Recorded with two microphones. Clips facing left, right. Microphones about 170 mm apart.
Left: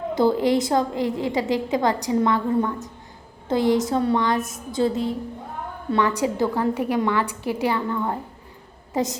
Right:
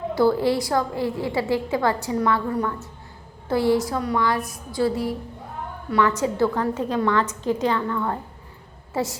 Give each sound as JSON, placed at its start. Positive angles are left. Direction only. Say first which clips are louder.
{"t": 0.1, "sound": "a woman's voice", "louder": "left 1 dB", "side_deg": 20}